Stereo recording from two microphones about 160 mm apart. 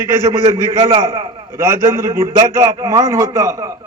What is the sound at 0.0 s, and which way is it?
A man's voice, 20° right (ahead or behind).